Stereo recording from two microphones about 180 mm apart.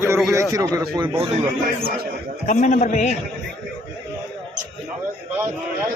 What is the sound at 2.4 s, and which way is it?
Speech, 45° left (ahead or behind).